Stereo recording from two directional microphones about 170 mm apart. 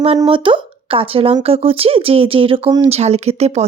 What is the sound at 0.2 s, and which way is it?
Speech, 30° right (ahead or behind).